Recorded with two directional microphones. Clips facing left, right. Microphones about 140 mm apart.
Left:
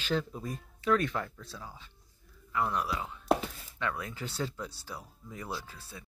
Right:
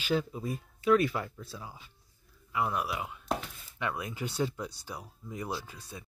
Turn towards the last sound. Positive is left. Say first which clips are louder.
# right 2 dB
turn(degrees=-15)  # may be behind; listen again after turning